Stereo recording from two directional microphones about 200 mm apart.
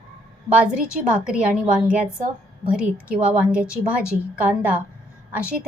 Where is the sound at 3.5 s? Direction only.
5° right (ahead or behind).